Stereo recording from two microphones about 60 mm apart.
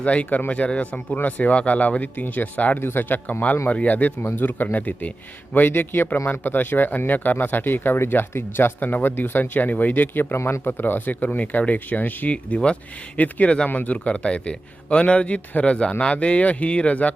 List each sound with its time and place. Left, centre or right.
0.0 s a man's voice: left
2.7 s a man's voice: left
10.3 s speech: left
10.6 s a man's voice: left